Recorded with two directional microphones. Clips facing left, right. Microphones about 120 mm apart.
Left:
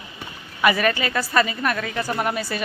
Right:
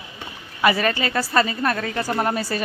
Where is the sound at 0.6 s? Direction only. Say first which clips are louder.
Even; 30° right (ahead or behind).